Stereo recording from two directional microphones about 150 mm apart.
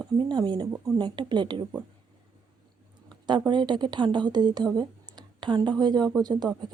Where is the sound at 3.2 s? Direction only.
30° right (ahead or behind).